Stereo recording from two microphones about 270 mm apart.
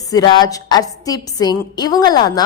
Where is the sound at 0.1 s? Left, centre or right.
Centre.